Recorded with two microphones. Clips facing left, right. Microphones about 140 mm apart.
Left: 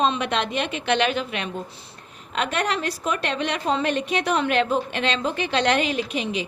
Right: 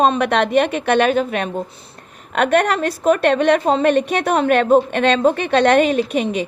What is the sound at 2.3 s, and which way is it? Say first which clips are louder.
A woman's voice: right 9 dB; 60° right (ahead or behind).